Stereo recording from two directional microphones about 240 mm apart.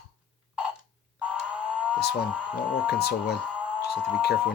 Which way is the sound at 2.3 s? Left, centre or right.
Centre.